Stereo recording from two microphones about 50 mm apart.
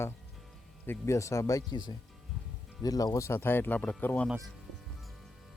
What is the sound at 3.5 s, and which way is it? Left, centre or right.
Speech, left.